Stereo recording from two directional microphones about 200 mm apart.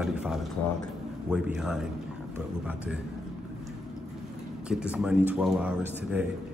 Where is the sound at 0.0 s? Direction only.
Centre (ahead or behind).